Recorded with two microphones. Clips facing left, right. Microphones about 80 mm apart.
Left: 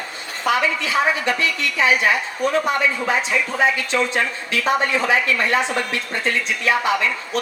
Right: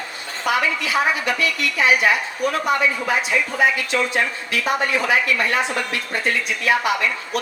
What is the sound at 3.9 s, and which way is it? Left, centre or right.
A woman's voice, left.